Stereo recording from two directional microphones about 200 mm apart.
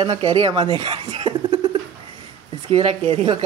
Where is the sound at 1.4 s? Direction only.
20° right (ahead or behind).